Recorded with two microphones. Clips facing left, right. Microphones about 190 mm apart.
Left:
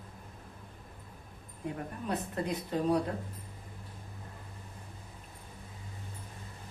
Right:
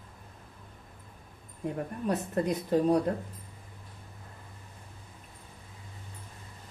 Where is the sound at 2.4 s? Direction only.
45° right (ahead or behind).